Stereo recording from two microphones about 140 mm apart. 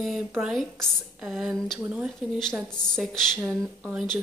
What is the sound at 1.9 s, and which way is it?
Speech, 10° right (ahead or behind).